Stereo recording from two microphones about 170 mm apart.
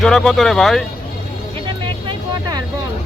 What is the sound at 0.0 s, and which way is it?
Speech, centre (ahead or behind).